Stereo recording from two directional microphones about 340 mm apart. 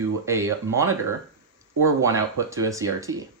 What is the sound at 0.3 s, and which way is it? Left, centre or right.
Speech, centre.